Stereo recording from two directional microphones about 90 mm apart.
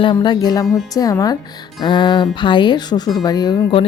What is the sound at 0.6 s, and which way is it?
Speech, centre (ahead or behind).